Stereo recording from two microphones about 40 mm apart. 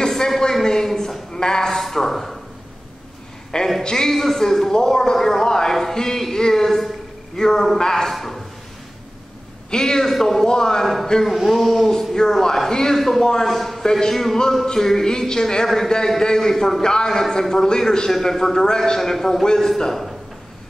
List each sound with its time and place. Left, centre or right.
0.0 s a sound: centre
0.4 s a man's voice: centre
1.8 s speech: centre
3.5 s a man's voice: centre
9.7 s a man's voice: centre
11.2 s speech: centre
11.9 s a man's voice: centre
19.9 s speech: centre